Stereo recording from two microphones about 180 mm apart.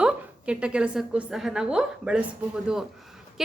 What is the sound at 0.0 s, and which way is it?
A woman's voice, 5° right (ahead or behind).